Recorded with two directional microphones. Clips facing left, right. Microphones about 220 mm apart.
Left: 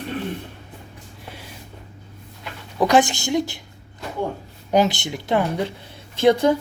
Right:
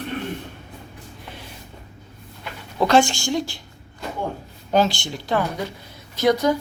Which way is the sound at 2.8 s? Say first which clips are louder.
Even; 15° left (ahead or behind).